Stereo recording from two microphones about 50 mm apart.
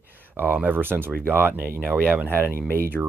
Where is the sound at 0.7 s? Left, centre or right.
Right.